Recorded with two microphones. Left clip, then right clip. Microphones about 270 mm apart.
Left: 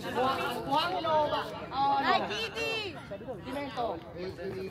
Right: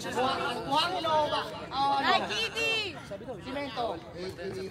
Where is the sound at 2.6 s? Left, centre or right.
Centre.